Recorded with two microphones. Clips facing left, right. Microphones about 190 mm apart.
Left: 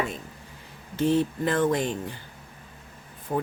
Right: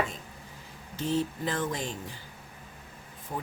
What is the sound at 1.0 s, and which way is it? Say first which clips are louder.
Speech: left 6 dB; 60° left (ahead or behind).